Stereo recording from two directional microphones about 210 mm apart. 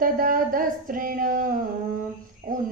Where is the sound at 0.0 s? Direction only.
40° right (ahead or behind).